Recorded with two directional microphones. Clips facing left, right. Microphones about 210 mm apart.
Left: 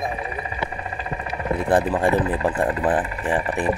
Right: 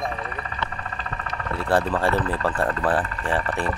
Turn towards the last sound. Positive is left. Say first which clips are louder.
# left 2 dB
turn(degrees=15)  # may be behind; listen again after turning